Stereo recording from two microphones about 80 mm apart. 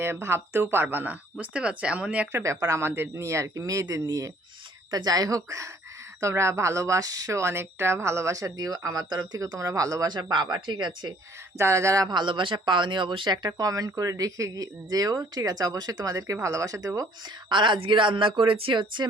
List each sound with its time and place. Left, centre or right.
0.0 s speech: right; by 2.3 s centre
2.3 s speech: right
4.0 s speech: right
10.1 s speech: right
11.5 s speech: right
12.0 s speech: right
12.6 s speech: right
13.6 s speech: right
17.5 s a woman's voice: right